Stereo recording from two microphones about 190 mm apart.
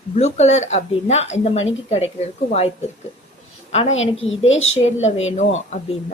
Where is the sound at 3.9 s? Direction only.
90° left.